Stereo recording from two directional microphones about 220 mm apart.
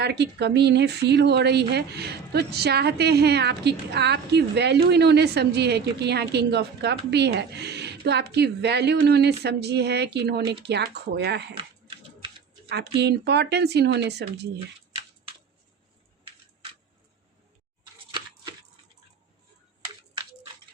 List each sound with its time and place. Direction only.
0.0 s speech: 50° right (ahead or behind)
11.5 s typing: 25° right (ahead or behind)
12.6 s speech: 50° right (ahead or behind)